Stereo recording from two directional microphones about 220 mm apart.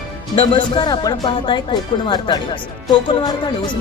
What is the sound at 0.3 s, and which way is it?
Speech, 25° left (ahead or behind).